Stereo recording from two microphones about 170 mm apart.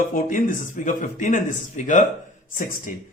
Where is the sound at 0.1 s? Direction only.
55° left (ahead or behind).